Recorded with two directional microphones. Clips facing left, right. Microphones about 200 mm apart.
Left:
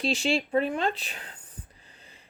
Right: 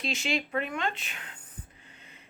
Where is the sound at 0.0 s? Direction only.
35° left (ahead or behind).